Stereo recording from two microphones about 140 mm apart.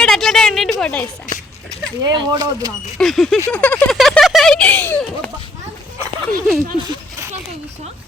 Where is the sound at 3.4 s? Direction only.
10° left (ahead or behind).